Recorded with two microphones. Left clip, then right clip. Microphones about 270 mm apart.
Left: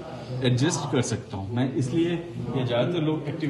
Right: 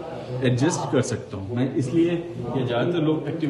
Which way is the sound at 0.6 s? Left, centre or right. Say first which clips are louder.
Right 4 dB; centre.